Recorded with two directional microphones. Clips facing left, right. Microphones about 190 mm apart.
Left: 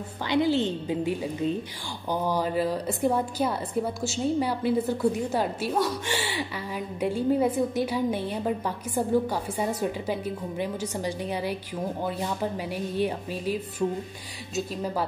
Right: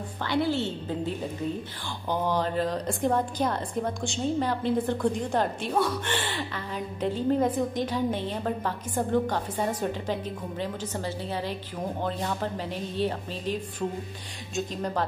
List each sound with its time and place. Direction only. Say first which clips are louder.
0.3 s a woman's voice: left 3 dB; 15° left (ahead or behind)